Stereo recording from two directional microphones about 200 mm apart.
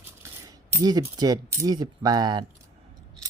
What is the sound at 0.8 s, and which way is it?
Speech, 20° right (ahead or behind).